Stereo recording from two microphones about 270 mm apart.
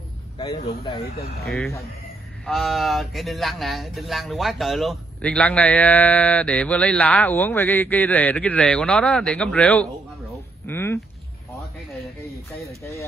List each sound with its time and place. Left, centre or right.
0.4 s speech: centre
1.4 s speech: centre
10.7 s a sound: centre